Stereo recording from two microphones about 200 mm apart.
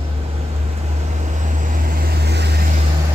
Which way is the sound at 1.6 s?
45° right (ahead or behind).